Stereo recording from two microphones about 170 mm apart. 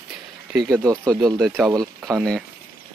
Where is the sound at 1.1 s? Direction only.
Centre (ahead or behind).